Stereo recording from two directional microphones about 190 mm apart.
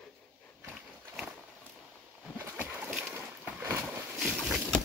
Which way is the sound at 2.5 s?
10° right (ahead or behind).